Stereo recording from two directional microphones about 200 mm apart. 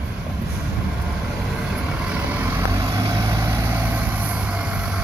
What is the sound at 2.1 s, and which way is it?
Vehicle, 10° right (ahead or behind).